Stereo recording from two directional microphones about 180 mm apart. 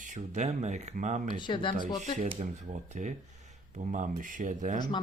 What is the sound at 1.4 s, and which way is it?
Speech, 25° left (ahead or behind).